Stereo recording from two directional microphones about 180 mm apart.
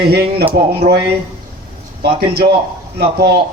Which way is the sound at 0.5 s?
65° right (ahead or behind).